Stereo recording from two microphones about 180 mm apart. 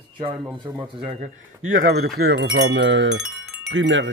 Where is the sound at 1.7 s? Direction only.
55° right (ahead or behind).